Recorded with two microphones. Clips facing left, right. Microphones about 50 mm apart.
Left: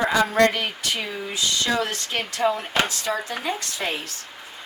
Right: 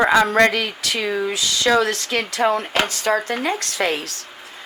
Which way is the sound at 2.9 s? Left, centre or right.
Right.